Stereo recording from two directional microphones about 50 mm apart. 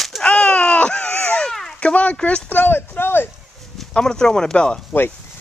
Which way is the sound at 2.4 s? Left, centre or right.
Left.